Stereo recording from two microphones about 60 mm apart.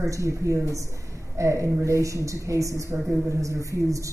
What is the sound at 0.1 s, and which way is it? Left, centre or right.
Speech, right.